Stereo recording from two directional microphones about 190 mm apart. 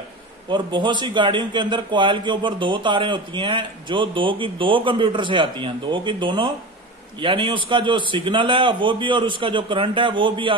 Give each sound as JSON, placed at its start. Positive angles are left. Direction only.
{"t": 0.5, "sound": "a man's voice", "side_deg": -25}